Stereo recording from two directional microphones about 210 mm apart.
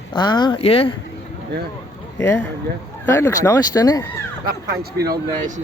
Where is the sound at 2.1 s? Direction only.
15° left (ahead or behind).